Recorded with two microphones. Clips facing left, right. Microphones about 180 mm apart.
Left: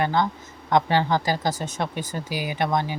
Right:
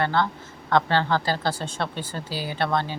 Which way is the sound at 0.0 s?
15° left (ahead or behind).